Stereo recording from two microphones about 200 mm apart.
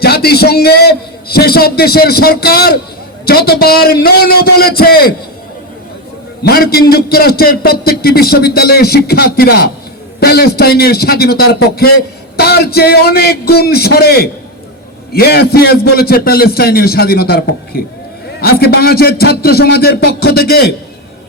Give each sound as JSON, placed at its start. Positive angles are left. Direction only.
{"t": 0.0, "sound": "a man's voice", "side_deg": 50}
{"t": 6.4, "sound": "a man's voice", "side_deg": 50}